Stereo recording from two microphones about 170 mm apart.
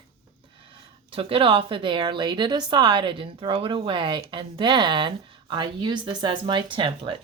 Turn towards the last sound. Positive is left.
turn(degrees=-30)  # may be behind; listen again after turning